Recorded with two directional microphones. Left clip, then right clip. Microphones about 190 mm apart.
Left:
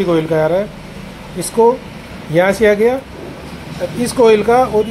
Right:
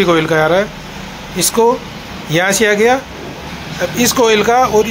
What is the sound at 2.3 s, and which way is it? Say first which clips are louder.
Speech: left 1 dB; centre (ahead or behind).